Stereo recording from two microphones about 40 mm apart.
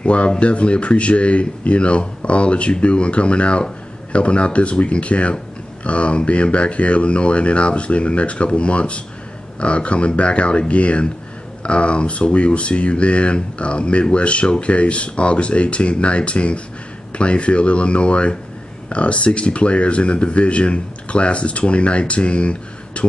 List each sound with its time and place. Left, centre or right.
0.0 s speech: left